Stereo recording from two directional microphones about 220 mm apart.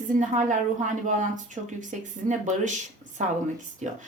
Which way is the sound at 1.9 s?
35° right (ahead or behind).